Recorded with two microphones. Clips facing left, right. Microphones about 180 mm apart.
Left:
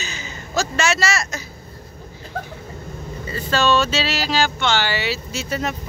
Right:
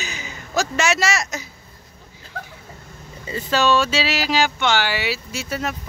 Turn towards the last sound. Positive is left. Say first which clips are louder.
# left 2 dB
turn(degrees=-10)  # may be behind; listen again after turning